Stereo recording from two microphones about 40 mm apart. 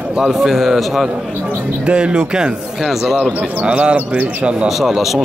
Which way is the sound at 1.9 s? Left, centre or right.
Right.